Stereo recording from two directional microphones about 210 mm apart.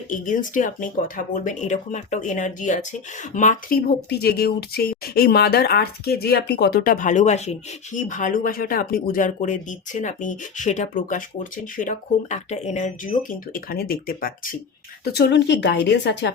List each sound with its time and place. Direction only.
0.1 s speech: 40° left (ahead or behind)
4.1 s speech: 50° left (ahead or behind)
15.1 s speech: 55° left (ahead or behind)